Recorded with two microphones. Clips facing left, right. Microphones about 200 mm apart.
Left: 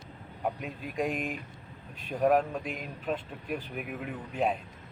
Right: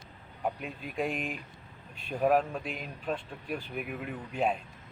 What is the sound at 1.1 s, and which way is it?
Speech, 40° left (ahead or behind).